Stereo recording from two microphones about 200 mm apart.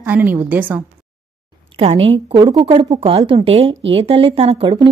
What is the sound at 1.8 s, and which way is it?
Speech, 30° right (ahead or behind).